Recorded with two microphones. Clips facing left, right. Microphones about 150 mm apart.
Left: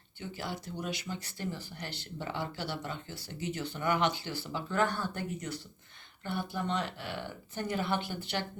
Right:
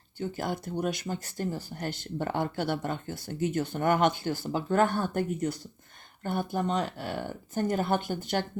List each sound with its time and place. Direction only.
0.2 s speech: 50° right (ahead or behind)